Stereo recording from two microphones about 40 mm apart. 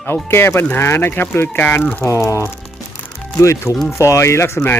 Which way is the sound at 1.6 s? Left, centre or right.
Left.